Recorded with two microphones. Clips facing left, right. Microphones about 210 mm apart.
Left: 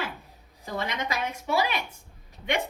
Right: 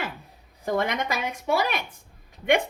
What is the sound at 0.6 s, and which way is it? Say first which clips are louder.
A woman's voice: right 6 dB; 55° right (ahead or behind).